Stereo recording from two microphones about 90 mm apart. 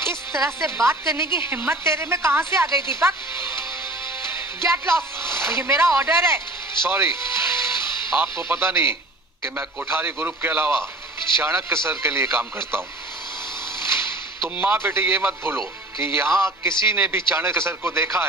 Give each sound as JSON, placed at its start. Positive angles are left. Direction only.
{"t": 0.0, "sound": "a woman's voice", "side_deg": -30}
{"t": 13.8, "sound": "a sound", "side_deg": -30}
{"t": 14.5, "sound": "a man's voice", "side_deg": -20}